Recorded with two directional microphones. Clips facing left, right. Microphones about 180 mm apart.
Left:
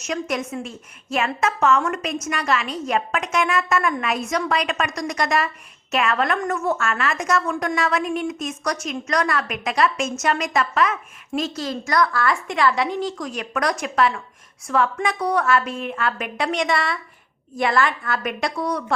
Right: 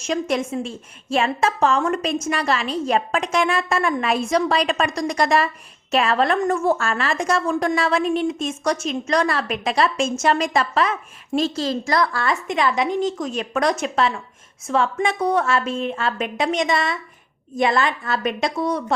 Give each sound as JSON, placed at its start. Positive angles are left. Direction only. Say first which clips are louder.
{"t": 0.0, "sound": "a woman's voice", "louder": "right 3 dB", "side_deg": -30}